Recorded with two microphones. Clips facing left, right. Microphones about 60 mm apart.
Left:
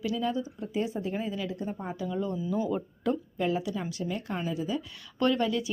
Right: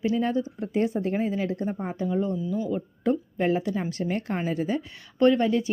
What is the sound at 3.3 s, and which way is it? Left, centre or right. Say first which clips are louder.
Speech: right 4 dB; right.